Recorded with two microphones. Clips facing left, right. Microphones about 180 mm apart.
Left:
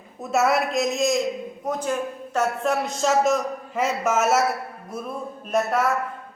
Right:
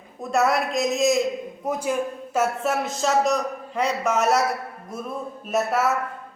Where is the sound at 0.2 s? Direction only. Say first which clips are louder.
Even; centre (ahead or behind).